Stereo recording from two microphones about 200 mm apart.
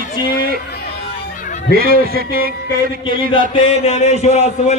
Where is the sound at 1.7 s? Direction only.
50° right (ahead or behind).